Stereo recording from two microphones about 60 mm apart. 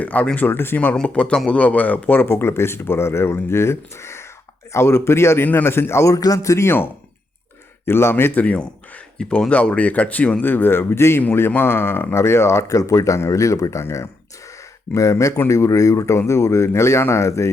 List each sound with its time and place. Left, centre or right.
0.0 s a man's voice: left
1.0 s speech: centre
2.2 s speech: left
6.1 s speech: left
7.9 s a man's voice: left
8.4 s speech: left
10.4 s a man's voice: left
13.1 s speech: left
13.4 s speech: left
14.9 s speech: left